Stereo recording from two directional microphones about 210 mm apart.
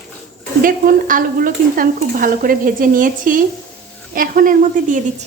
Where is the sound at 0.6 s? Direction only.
40° right (ahead or behind).